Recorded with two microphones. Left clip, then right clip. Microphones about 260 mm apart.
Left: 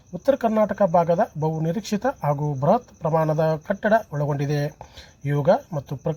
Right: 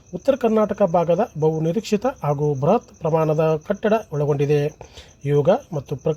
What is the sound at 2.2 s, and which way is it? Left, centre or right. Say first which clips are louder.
Speech: even; left.